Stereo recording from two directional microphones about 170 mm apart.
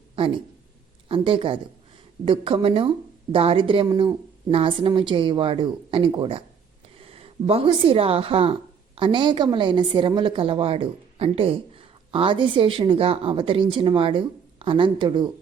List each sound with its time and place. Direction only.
0.2 s a woman's voice: 30° right (ahead or behind)